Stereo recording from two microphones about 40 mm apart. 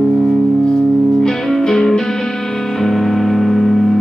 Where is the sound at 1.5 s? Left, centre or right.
Centre.